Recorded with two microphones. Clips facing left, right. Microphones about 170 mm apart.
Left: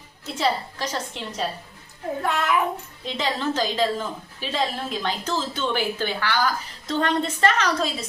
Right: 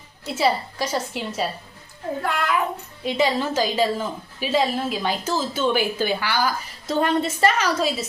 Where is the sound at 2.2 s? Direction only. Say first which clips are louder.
Left 1 dB; 20° left (ahead or behind).